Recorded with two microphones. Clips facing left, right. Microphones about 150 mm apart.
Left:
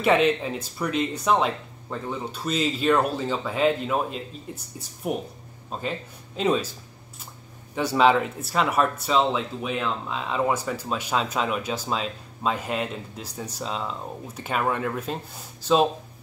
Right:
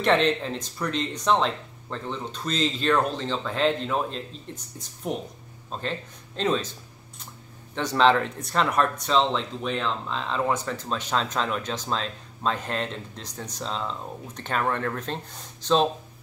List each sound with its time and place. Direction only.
0.0 s speech: 5° left (ahead or behind)
7.7 s speech: 10° left (ahead or behind)